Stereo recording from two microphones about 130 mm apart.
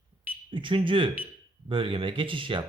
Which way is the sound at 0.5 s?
40° right (ahead or behind).